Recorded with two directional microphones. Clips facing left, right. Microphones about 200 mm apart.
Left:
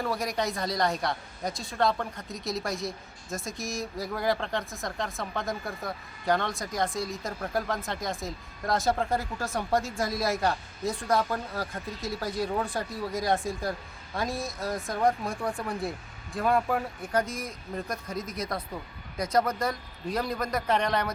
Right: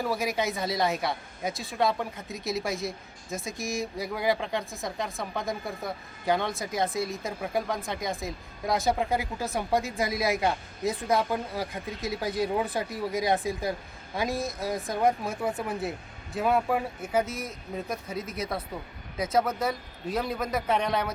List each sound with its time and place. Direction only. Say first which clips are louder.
0.0 s speech: right 1 dB; centre (ahead or behind)
11.3 s speech: right 2 dB; 15° right (ahead or behind)
11.9 s speech: right 2 dB; centre (ahead or behind)
12.2 s speech: right 2 dB; 20° right (ahead or behind)
13.1 s speech: right 1 dB; centre (ahead or behind)